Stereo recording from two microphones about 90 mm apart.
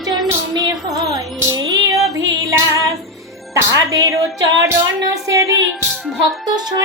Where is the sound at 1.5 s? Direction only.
40° right (ahead or behind).